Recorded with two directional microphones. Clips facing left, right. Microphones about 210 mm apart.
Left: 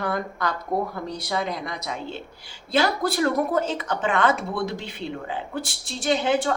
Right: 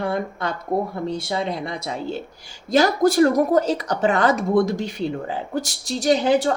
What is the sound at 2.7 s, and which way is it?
A woman's voice, 45° right (ahead or behind).